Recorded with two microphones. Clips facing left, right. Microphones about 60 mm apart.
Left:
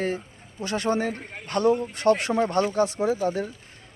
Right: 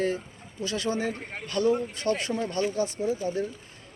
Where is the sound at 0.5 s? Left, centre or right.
Left.